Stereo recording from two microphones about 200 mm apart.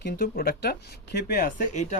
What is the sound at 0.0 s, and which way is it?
Speech, 50° left (ahead or behind).